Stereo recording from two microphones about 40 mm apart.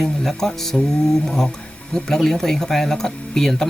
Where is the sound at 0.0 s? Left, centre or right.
Centre.